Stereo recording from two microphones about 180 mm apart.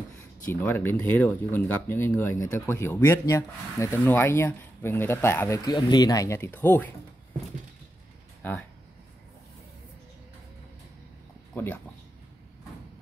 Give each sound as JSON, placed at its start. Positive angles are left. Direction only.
{"t": 0.5, "sound": "speech", "side_deg": 10}
{"t": 5.7, "sound": "speech", "side_deg": 25}
{"t": 8.4, "sound": "speech", "side_deg": 5}
{"t": 11.5, "sound": "speech", "side_deg": 10}